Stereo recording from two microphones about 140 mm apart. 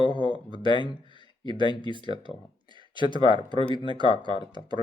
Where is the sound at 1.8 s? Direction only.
35° right (ahead or behind).